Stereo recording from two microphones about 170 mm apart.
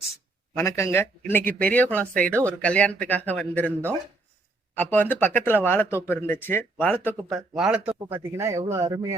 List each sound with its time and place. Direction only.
0.5 s speech: 15° left (ahead or behind)
4.7 s speech: 10° left (ahead or behind)
7.5 s speech: 5° right (ahead or behind); by 9.1 s 20° right (ahead or behind)